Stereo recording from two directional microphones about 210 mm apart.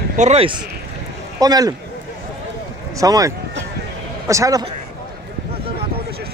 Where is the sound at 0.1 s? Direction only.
30° right (ahead or behind).